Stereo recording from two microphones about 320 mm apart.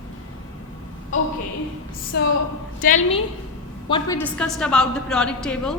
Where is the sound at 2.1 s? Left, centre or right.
Left; by 4.1 s centre.